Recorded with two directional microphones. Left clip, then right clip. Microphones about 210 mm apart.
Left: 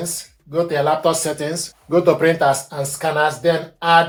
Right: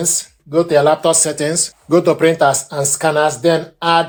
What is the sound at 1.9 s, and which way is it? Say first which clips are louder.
Speech: right 2 dB; 60° right (ahead or behind).